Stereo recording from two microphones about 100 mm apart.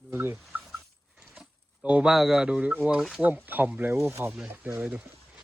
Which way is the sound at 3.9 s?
25° right (ahead or behind).